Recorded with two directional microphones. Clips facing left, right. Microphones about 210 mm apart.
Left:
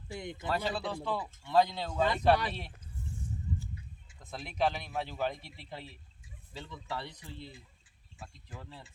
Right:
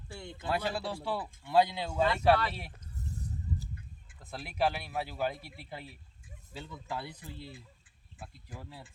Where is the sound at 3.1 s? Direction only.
40° right (ahead or behind).